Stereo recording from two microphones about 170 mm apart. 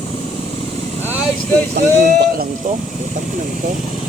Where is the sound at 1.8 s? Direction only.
60° right (ahead or behind).